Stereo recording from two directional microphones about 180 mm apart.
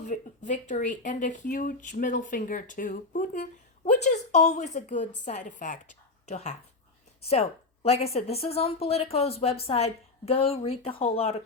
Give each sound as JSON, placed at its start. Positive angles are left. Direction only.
{"t": 0.0, "sound": "speech", "side_deg": 40}